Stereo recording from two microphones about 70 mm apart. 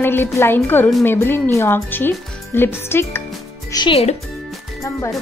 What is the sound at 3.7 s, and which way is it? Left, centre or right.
Speech, left.